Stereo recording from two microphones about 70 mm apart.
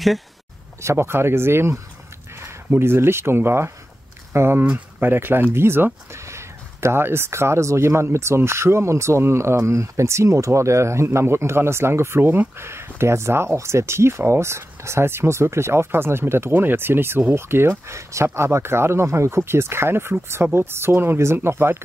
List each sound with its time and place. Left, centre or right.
0.7 s speech: right